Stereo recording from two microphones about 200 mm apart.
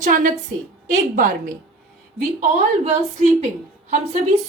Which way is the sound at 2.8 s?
35° right (ahead or behind).